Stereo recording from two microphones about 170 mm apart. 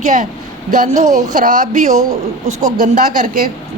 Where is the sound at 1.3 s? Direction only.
50° right (ahead or behind).